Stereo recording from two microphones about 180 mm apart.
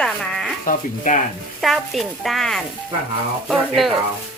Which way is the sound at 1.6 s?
Centre (ahead or behind).